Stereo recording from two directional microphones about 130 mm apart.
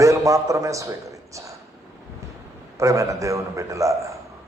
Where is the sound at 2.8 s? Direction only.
25° right (ahead or behind).